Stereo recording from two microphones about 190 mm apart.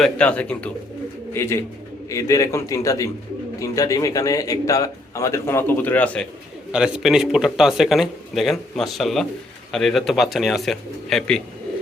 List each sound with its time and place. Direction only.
0.0 s a man's voice: 5° left (ahead or behind)
6.7 s speech: 5° right (ahead or behind)